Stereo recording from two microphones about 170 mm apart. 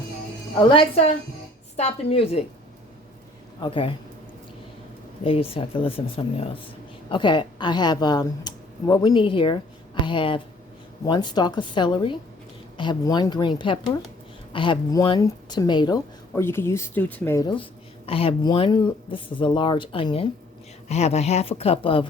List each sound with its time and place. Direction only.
0.6 s speech: 30° left (ahead or behind)
3.6 s speech: 30° left (ahead or behind)
5.2 s speech: 35° left (ahead or behind)
16.3 s speech: 15° left (ahead or behind)
17.5 s speech: 30° left (ahead or behind)